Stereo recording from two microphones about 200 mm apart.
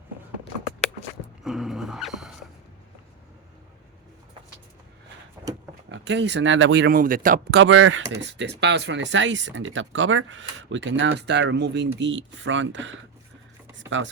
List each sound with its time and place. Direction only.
1.5 s dog: centre (ahead or behind)
5.9 s speech: 60° right (ahead or behind); by 7.4 s 40° right (ahead or behind)
7.5 s speech: 70° right (ahead or behind)
8.2 s speech: 60° right (ahead or behind)